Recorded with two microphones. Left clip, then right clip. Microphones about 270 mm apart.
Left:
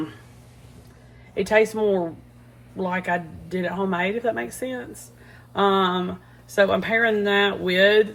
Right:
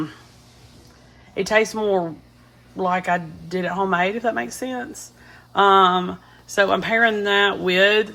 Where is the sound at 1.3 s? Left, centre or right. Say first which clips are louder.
Even; right.